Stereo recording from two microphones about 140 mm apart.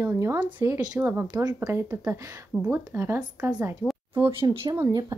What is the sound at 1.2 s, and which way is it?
Speech, 30° right (ahead or behind).